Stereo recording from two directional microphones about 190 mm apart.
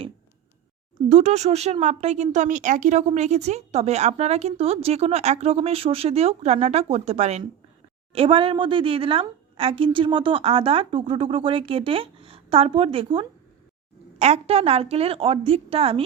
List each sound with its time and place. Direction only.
1.0 s speech: 35° right (ahead or behind)